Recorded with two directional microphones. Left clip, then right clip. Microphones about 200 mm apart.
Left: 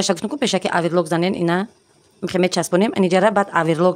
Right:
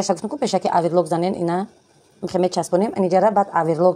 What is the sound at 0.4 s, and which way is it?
Speech, 20° left (ahead or behind).